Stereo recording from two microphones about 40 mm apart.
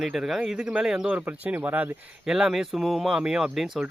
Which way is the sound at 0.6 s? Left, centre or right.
Right.